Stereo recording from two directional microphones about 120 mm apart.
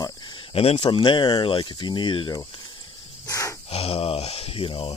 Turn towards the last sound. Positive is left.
turn(degrees=45)  # may be behind; listen again after turning